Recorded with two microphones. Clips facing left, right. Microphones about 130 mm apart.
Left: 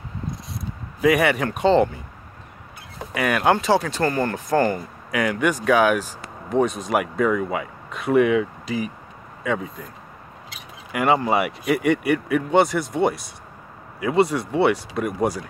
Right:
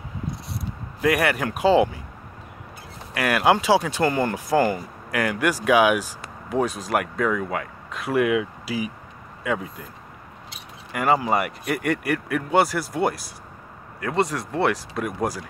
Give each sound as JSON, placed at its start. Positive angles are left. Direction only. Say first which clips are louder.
{"t": 1.0, "sound": "speech", "louder": "left 3 dB", "side_deg": 0}
{"t": 3.2, "sound": "speech", "louder": "even", "side_deg": -5}
{"t": 10.9, "sound": "speech", "louder": "left 1 dB", "side_deg": 0}